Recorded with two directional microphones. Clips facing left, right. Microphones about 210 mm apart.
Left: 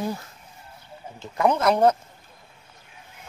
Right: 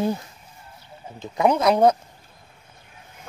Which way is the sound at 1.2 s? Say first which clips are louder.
Right 2 dB; 15° right (ahead or behind).